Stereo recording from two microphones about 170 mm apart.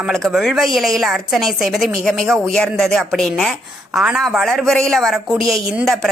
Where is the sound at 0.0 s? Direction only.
Centre (ahead or behind).